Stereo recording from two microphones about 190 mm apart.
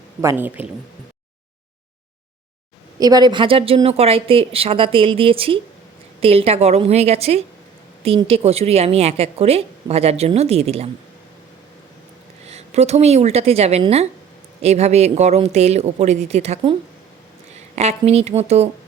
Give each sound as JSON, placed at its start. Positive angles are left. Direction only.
{"t": 0.2, "sound": "a man's voice", "side_deg": -10}
{"t": 3.0, "sound": "a woman's voice", "side_deg": -20}
{"t": 12.5, "sound": "a woman's voice", "side_deg": -35}
{"t": 17.7, "sound": "a woman's voice", "side_deg": -35}